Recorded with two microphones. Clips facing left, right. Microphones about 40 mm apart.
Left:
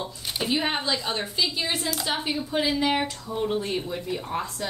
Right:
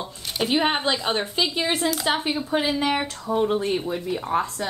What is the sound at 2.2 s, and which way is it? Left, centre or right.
A woman's voice, right.